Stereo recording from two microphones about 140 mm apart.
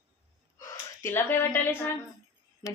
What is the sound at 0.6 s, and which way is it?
A woman's voice, 20° left (ahead or behind).